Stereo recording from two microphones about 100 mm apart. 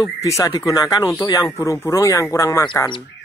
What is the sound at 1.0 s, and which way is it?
Speech, 25° left (ahead or behind).